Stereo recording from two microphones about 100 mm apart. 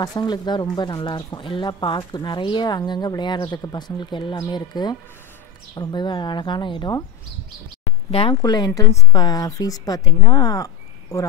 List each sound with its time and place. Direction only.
0.0 s speech: 45° left (ahead or behind)
8.1 s speech: 70° left (ahead or behind)
8.4 s a woman's voice: 45° left (ahead or behind)